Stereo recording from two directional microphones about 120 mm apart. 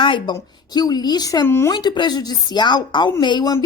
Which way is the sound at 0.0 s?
45° left (ahead or behind).